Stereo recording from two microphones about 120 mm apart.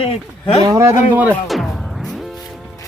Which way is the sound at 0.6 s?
30° right (ahead or behind).